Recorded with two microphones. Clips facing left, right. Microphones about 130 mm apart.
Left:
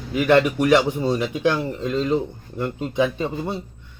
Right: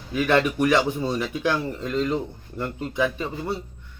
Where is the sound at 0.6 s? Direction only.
15° left (ahead or behind).